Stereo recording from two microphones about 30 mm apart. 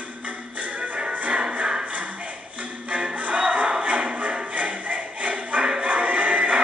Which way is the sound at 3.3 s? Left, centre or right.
Right.